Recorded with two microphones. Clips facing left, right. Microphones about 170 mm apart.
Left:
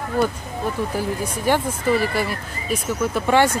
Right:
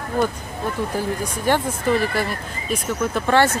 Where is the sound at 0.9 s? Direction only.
10° left (ahead or behind).